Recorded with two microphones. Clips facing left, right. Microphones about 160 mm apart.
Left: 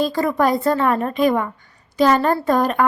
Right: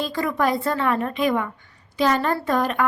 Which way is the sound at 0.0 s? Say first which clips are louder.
Left 5 dB; 35° left (ahead or behind).